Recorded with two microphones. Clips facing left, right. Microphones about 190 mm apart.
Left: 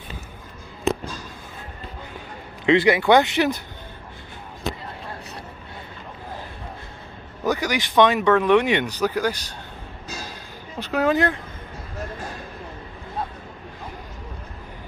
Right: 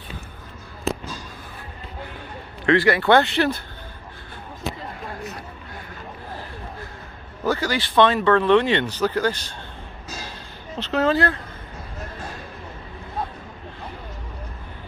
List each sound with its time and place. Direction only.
2.6 s speech: 20° left (ahead or behind)
7.4 s speech: 15° left (ahead or behind)
10.8 s speech: 10° left (ahead or behind)